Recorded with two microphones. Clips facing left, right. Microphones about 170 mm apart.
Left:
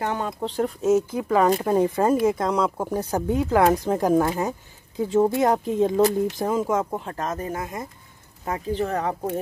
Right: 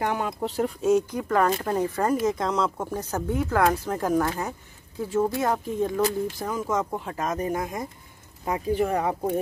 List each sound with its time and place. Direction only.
0.0 s speech: 10° right (ahead or behind); by 2.1 s 20° left (ahead or behind)
2.2 s speech: 10° left (ahead or behind); by 6.7 s 25° left (ahead or behind)
6.7 s speech: 10° left (ahead or behind)
7.0 s speech: 10° right (ahead or behind)